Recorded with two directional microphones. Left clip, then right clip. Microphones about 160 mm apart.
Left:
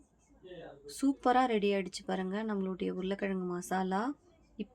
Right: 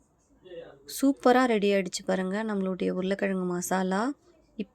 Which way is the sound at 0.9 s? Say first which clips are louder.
Right 7 dB; 35° right (ahead or behind).